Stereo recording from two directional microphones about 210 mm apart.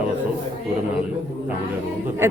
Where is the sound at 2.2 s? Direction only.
10° right (ahead or behind).